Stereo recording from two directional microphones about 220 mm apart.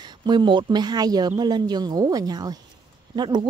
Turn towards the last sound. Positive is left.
turn(degrees=-20)  # may be behind; listen again after turning